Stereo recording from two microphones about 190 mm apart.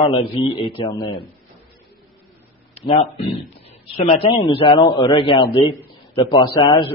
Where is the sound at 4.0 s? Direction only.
30° left (ahead or behind).